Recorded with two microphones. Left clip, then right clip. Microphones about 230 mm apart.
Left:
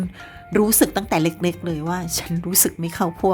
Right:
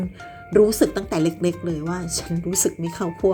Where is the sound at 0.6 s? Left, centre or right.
Left.